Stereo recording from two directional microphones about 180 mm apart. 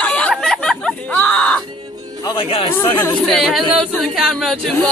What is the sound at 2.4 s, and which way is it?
Speech, 30° left (ahead or behind).